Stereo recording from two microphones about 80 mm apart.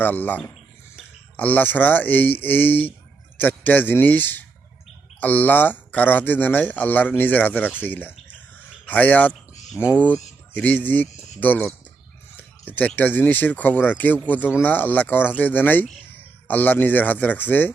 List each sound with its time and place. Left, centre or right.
0.0 s speech: left
12.4 s a sound: left
13.0 s speech: left